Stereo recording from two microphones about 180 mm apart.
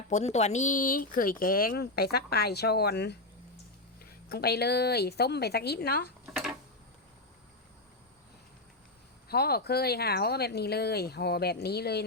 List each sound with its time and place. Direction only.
0.1 s speech: 40° left (ahead or behind); by 6.1 s 60° left (ahead or behind)
6.3 s a sound: 5° right (ahead or behind)
9.3 s speech: 60° left (ahead or behind)